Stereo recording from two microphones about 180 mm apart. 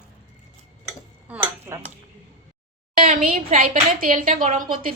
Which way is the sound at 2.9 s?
50° right (ahead or behind).